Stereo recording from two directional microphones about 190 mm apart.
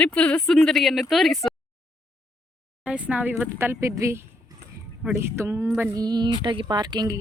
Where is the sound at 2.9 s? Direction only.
5° right (ahead or behind); by 7.1 s 20° right (ahead or behind).